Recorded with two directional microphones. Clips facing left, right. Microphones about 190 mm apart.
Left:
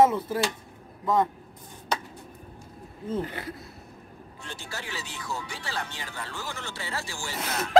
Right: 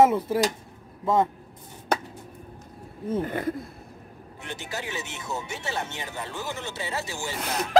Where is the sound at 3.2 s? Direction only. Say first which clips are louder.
Right 5 dB; 50° right (ahead or behind).